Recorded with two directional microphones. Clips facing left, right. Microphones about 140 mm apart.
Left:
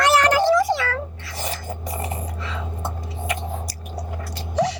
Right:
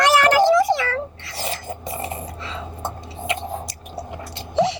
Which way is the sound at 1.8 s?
25° right (ahead or behind).